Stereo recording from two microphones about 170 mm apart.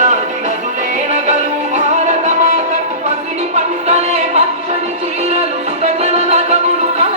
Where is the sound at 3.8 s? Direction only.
40° right (ahead or behind).